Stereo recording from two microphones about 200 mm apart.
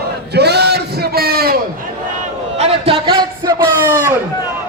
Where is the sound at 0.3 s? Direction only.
55° right (ahead or behind).